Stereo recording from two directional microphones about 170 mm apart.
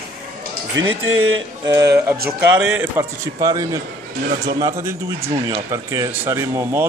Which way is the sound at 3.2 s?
20° right (ahead or behind).